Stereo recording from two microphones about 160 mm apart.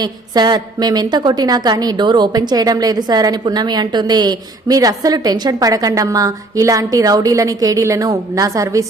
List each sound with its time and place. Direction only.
0.0 s a woman's voice: 25° right (ahead or behind)